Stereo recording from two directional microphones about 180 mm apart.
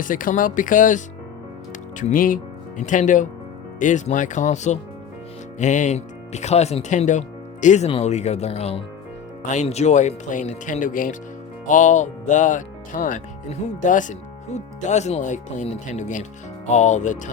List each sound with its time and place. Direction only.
0.0 s speech: 50° left (ahead or behind)